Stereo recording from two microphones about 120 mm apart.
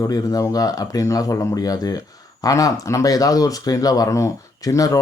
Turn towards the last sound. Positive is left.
turn(degrees=30)  # may be behind; listen again after turning